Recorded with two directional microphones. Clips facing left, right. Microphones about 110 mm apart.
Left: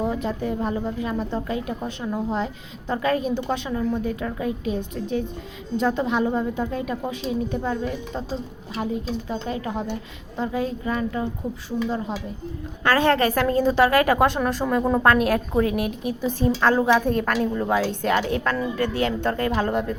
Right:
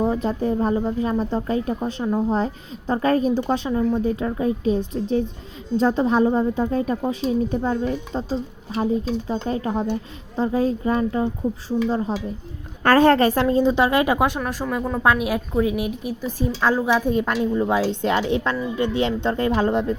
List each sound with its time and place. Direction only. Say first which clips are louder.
0.0 s a woman's voice: right 4 dB; 35° right (ahead or behind)
2.0 s a woman's voice: right 6 dB; 25° right (ahead or behind)
2.3 s a woman's voice: right 4 dB; 35° right (ahead or behind); by 14.3 s 20° right (ahead or behind)
14.3 s a woman's voice: left 2 dB; 5° right (ahead or behind)
17.7 s a woman's voice: right 1 dB; 25° right (ahead or behind)